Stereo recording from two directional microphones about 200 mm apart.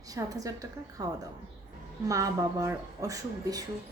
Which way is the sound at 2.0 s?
15° right (ahead or behind).